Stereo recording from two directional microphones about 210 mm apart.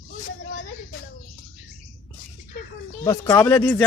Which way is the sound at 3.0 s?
20° left (ahead or behind).